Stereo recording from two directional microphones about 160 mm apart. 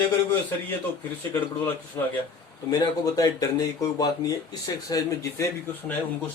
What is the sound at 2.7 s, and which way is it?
Speech, 25° left (ahead or behind).